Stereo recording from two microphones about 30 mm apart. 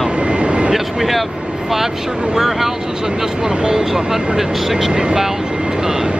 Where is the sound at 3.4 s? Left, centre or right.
Right.